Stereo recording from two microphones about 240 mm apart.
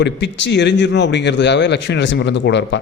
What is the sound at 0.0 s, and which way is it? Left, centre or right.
A man's voice, left.